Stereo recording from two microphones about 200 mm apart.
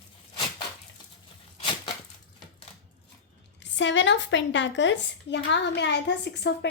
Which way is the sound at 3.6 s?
65° left (ahead or behind).